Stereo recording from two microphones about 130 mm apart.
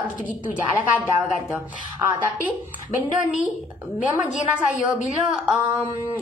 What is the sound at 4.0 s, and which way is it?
A woman's voice, 75° left (ahead or behind).